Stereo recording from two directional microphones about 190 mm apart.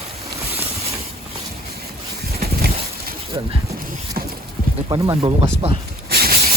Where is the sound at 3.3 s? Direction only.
20° right (ahead or behind).